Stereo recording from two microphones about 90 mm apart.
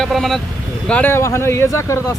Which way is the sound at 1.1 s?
30° left (ahead or behind).